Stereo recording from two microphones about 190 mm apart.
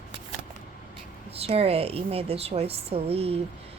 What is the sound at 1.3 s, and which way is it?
A woman's voice, 30° right (ahead or behind).